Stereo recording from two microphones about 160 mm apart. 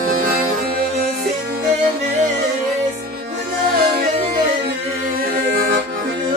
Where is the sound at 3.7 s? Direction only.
75° right (ahead or behind).